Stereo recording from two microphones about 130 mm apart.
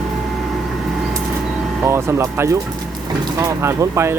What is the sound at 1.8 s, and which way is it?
Speech, 20° right (ahead or behind).